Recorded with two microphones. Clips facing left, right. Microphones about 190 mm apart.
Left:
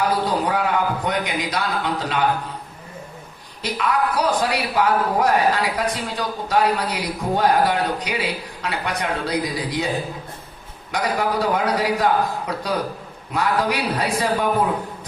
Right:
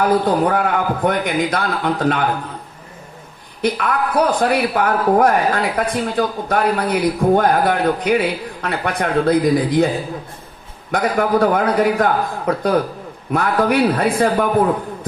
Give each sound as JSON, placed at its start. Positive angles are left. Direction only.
{"t": 0.0, "sound": "a man's voice", "side_deg": -55}
{"t": 3.6, "sound": "a man's voice", "side_deg": -55}
{"t": 10.9, "sound": "a man's voice", "side_deg": -55}